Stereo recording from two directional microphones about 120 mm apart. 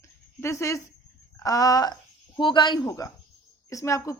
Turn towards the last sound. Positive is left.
turn(degrees=25)  # may be behind; listen again after turning